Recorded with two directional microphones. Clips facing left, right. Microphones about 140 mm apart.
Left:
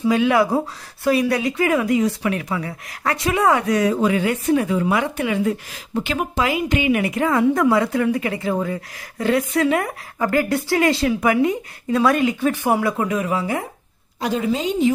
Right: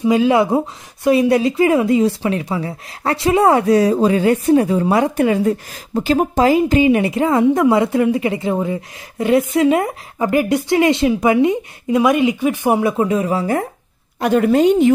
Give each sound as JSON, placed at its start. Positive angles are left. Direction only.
{"t": 0.2, "sound": "speech", "side_deg": -25}
{"t": 14.2, "sound": "a woman's voice", "side_deg": -60}